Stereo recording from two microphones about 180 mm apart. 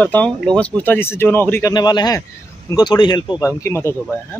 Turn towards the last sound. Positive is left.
turn(degrees=10)  # may be behind; listen again after turning